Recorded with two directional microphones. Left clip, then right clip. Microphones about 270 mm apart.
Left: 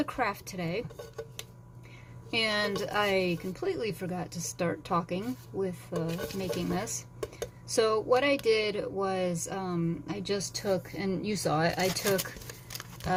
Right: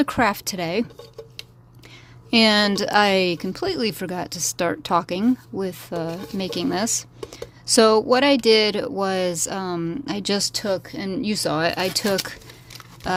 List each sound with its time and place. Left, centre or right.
0.0 s speech: right
2.3 s speech: right